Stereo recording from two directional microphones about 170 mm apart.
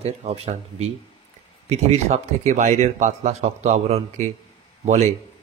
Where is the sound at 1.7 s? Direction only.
40° right (ahead or behind).